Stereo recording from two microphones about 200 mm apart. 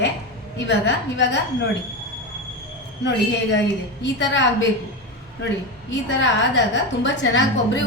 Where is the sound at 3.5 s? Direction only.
65° left (ahead or behind).